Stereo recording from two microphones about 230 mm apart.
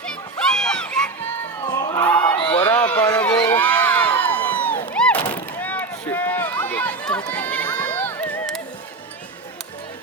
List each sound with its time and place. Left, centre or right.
0.0 s music: centre
1.6 s crowd: centre
2.6 s a sound: centre
5.2 s run: centre